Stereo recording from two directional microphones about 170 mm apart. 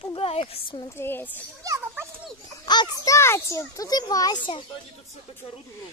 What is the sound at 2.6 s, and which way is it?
A child's voice, 25° left (ahead or behind).